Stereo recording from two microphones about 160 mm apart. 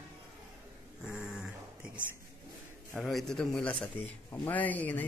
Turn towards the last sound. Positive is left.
turn(degrees=10)  # may be behind; listen again after turning